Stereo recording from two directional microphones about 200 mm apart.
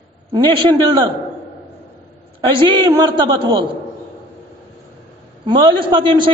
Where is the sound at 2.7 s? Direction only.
20° right (ahead or behind).